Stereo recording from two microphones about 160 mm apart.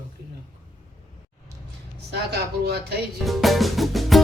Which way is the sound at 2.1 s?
90° right.